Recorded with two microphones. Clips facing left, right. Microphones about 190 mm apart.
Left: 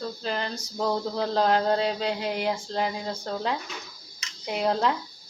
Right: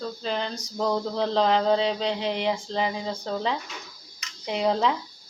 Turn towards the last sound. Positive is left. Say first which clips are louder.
# right 1 dB
turn(degrees=0)  # may be behind; listen again after turning